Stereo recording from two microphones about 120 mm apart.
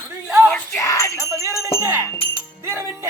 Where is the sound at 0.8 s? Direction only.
25° left (ahead or behind).